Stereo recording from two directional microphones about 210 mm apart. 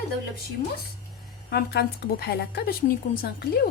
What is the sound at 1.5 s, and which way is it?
Speech, 50° left (ahead or behind).